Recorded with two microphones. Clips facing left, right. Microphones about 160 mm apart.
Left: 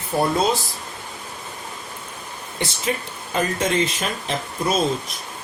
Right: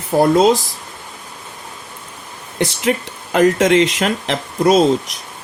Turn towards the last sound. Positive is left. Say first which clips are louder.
# right 9 dB
turn(degrees=-85)